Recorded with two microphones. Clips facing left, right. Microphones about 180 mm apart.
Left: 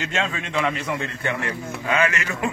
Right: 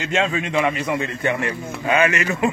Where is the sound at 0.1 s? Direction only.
10° right (ahead or behind).